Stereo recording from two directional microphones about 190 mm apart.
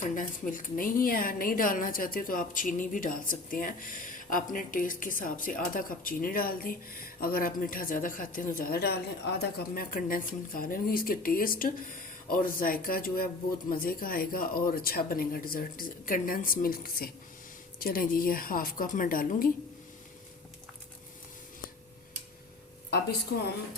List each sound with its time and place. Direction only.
0.2 s speech: 45° left (ahead or behind)